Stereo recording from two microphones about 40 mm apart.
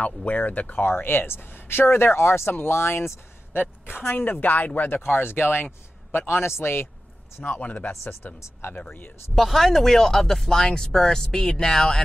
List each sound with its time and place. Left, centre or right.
0.0 s speech: left
0.8 s speech: left
3.8 s a woman's voice: left
4.9 s speech: left
6.1 s a man's voice: left
7.4 s a woman's voice: left
7.9 s a man's voice: left
9.3 s speech: centre